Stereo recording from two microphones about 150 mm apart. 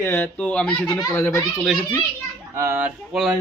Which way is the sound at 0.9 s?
25° left (ahead or behind).